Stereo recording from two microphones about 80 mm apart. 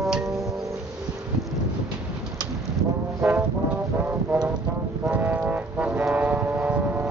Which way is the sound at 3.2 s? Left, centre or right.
Right.